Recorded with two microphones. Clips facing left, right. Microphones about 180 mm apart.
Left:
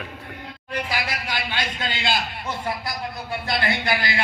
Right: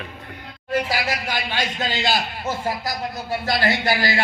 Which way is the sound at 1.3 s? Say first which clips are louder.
Right 2 dB; 45° right (ahead or behind).